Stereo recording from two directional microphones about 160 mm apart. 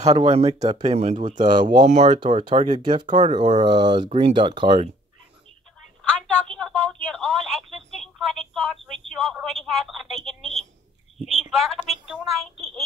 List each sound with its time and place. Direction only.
0.2 s speech: 35° right (ahead or behind)
2.1 s speech: 30° right (ahead or behind)
2.8 s speech: 30° right (ahead or behind)
6.0 s a woman's voice: 5° left (ahead or behind)